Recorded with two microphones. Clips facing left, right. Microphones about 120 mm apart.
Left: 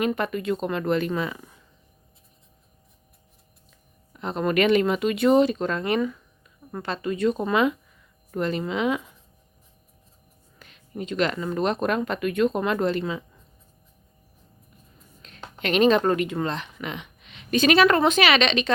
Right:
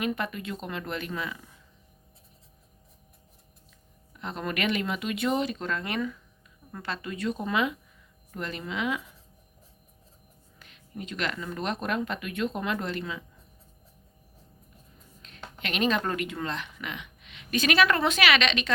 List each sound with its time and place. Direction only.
0.0 s speech: 40° left (ahead or behind)
4.2 s speech: 30° left (ahead or behind)
10.6 s speech: 30° left (ahead or behind)
11.8 s speech: 45° left (ahead or behind); by 13.2 s 30° left (ahead or behind)
15.2 s speech: 35° left (ahead or behind)